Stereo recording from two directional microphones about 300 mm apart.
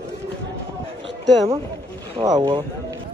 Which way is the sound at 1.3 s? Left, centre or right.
Centre.